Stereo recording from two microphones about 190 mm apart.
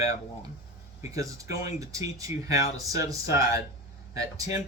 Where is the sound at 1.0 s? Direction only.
15° right (ahead or behind).